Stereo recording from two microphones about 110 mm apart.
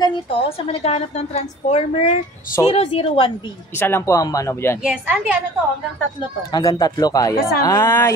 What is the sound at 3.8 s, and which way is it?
Speech, 20° left (ahead or behind).